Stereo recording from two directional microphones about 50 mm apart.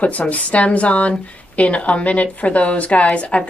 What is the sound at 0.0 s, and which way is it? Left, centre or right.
A woman's voice, left.